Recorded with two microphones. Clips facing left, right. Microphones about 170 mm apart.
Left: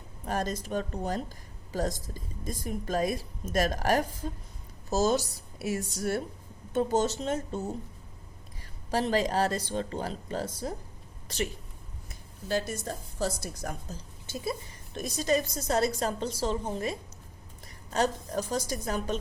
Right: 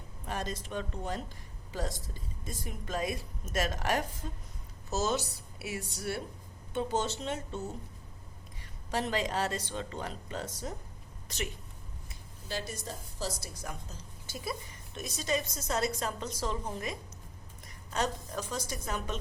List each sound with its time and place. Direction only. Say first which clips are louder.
0.3 s a woman's voice: left 6 dB; 45° left (ahead or behind)
8.9 s a woman's voice: left 5 dB; 35° left (ahead or behind)
12.0 s a woman's voice: left 8 dB; 50° left (ahead or behind)
14.3 s a woman's voice: left 5 dB; 25° left (ahead or behind)
14.9 s a woman's voice: left 6 dB; 40° left (ahead or behind)